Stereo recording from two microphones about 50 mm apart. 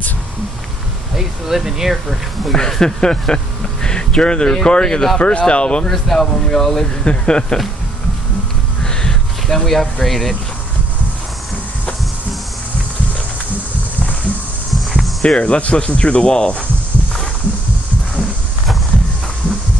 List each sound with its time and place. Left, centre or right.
1.1 s speech: centre
2.5 s speech: centre
5.9 s speech: centre
7.0 s speech: centre
8.8 s a sound: centre
10.0 s speech: centre
15.2 s speech: left